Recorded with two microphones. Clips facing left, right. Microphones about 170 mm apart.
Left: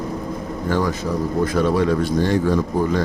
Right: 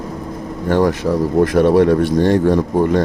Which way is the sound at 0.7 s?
70° right (ahead or behind).